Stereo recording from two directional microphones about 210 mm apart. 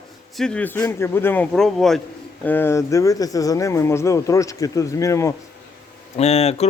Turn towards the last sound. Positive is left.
turn(degrees=30)  # may be behind; listen again after turning